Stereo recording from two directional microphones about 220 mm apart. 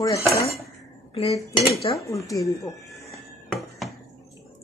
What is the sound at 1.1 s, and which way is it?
Dishes, 25° left (ahead or behind).